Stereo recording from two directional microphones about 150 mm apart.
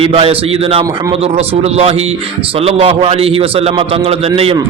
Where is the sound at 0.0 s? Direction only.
40° right (ahead or behind).